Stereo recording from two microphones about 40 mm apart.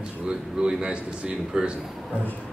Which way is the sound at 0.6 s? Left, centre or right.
Centre.